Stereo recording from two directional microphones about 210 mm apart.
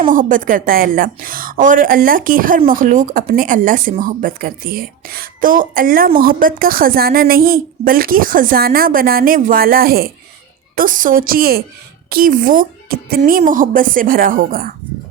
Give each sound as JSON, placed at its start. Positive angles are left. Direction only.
{"t": 0.1, "sound": "a woman's voice", "side_deg": -40}